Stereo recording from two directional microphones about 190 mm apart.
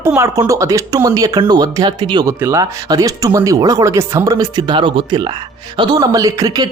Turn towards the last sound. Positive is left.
turn(degrees=-20)  # may be behind; listen again after turning